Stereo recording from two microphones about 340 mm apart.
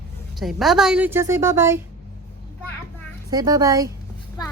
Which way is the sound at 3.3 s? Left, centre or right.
Centre.